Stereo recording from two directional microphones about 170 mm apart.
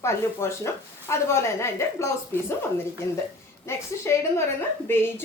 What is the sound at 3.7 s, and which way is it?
Speech, 15° left (ahead or behind).